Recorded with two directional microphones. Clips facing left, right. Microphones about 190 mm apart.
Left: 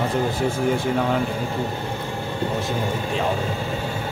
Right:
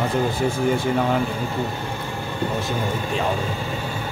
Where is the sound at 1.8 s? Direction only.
25° left (ahead or behind).